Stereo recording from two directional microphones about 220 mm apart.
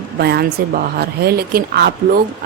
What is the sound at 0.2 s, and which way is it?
Speech, 45° right (ahead or behind).